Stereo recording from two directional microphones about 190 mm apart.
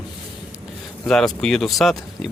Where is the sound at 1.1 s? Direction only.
5° left (ahead or behind).